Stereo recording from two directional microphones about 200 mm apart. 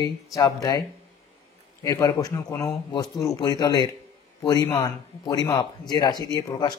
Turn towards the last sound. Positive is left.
turn(degrees=20)  # may be behind; listen again after turning